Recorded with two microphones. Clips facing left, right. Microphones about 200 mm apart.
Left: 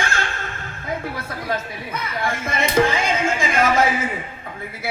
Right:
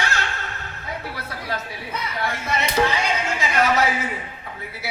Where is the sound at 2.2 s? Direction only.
50° left (ahead or behind).